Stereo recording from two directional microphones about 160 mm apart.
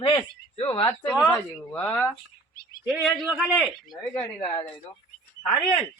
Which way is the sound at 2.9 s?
5° right (ahead or behind).